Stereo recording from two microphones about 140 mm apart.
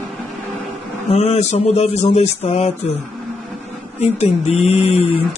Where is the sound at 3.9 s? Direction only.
50° left (ahead or behind).